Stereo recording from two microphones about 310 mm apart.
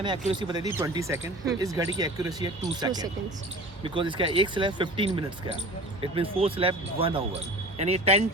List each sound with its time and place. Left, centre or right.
0.0 s speech: centre